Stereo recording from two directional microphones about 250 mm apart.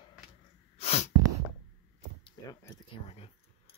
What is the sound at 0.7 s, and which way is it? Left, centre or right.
Sneeze, left.